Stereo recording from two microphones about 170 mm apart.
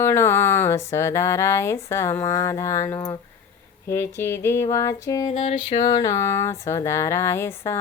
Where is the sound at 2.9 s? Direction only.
25° left (ahead or behind).